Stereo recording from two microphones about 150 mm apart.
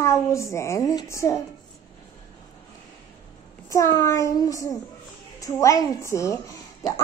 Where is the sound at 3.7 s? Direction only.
20° left (ahead or behind).